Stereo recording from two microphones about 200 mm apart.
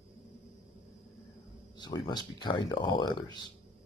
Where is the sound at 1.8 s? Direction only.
20° left (ahead or behind).